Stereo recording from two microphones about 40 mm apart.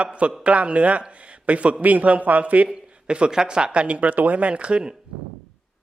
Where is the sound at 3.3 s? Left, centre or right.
Centre.